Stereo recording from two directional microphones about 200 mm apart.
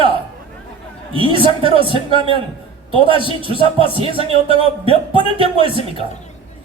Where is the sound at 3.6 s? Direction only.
25° right (ahead or behind).